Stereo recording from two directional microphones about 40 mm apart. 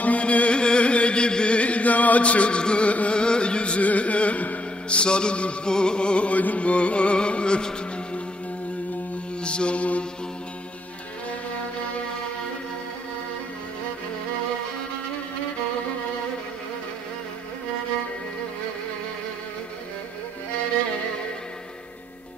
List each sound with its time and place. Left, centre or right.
0.0 s music: left
3.8 s a sound: left
5.7 s music: left
9.4 s mantra: left